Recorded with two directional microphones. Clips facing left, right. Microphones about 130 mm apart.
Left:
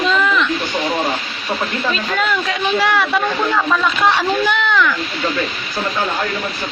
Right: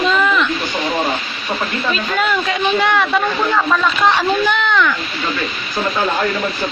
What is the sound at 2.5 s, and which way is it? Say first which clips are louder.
Speech: right 1 dB; centre (ahead or behind).